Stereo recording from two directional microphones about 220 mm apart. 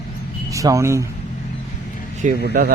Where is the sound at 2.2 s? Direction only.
45° right (ahead or behind).